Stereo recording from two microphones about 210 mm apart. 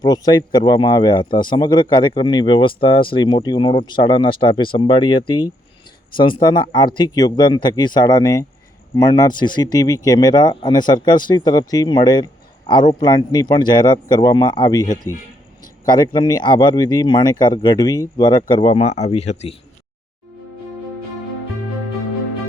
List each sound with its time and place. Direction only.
0.0 s speech: 20° left (ahead or behind)
15.9 s speech: 20° left (ahead or behind)